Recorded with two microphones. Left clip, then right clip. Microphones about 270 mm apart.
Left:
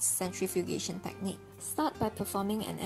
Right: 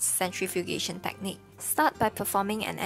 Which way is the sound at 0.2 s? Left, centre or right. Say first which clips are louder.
Right 5 dB; right.